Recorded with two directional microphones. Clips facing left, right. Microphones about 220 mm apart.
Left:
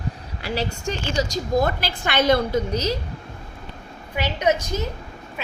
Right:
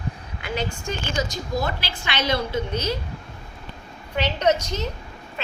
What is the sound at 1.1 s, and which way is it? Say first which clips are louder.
A woman's voice: left 6 dB; 45° left (ahead or behind).